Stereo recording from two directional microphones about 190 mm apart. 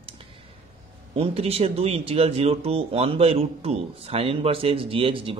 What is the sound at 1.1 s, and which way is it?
Speech, 30° right (ahead or behind).